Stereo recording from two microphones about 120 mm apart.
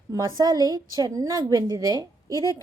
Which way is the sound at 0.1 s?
30° right (ahead or behind).